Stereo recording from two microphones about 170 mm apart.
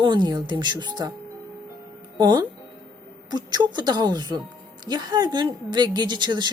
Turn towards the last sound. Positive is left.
turn(degrees=-25)  # may be behind; listen again after turning